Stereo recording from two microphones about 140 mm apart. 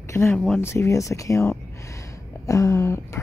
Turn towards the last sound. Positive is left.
turn(degrees=20)  # may be behind; listen again after turning